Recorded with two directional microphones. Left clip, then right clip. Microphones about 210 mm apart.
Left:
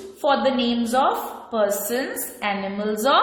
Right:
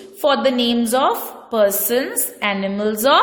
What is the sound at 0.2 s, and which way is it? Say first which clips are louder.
A woman's voice: right 4 dB; 45° right (ahead or behind).